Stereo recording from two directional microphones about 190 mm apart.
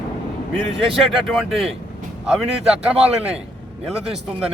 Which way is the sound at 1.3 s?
Centre (ahead or behind).